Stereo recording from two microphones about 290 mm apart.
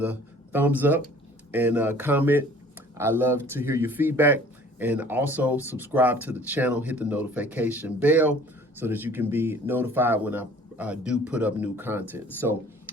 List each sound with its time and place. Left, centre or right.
0.0 s speech: centre